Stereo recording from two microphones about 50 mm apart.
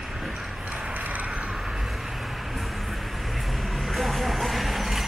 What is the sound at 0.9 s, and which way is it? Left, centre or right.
Horse, right.